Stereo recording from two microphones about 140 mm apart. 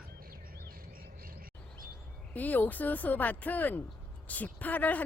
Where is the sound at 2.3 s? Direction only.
10° left (ahead or behind).